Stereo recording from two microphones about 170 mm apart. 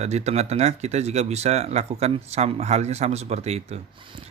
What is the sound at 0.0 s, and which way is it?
Mantra, 40° right (ahead or behind).